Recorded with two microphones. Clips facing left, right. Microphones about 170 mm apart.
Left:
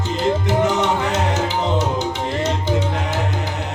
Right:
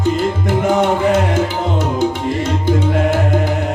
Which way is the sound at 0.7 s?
50° right (ahead or behind).